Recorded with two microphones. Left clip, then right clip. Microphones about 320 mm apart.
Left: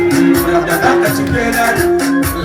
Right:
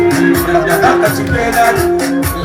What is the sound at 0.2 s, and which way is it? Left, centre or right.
Music, centre.